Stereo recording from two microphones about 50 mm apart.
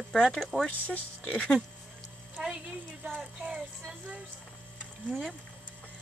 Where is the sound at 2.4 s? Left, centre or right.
Centre.